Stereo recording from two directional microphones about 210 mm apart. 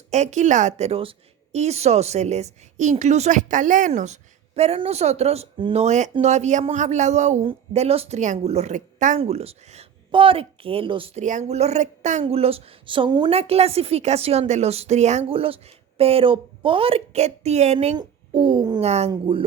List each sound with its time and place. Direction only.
0.1 s a woman's voice: 35° right (ahead or behind)
18.8 s a woman's voice: 30° right (ahead or behind)